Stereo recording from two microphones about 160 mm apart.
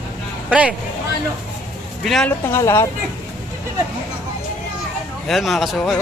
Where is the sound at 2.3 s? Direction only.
15° left (ahead or behind).